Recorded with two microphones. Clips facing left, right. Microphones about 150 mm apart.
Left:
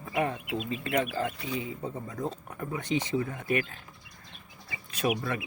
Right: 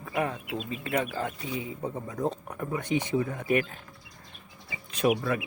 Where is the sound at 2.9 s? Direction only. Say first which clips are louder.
Right 1 dB; 15° right (ahead or behind).